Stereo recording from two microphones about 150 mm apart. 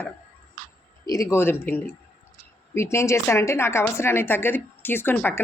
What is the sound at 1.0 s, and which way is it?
A woman's voice, 25° left (ahead or behind).